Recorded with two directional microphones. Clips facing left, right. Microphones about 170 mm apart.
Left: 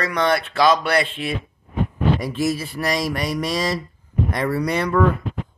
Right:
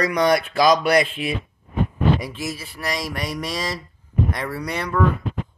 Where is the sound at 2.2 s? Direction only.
5° right (ahead or behind).